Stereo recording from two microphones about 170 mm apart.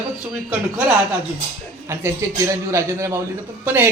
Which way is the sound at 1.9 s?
15° right (ahead or behind).